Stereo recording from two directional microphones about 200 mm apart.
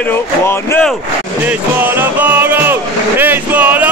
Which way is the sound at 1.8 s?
10° right (ahead or behind).